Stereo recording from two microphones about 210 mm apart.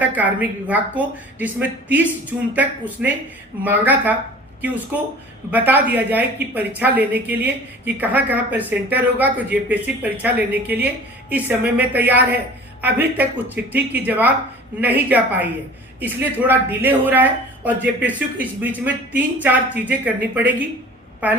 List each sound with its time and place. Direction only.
0.0 s speech: 5° right (ahead or behind)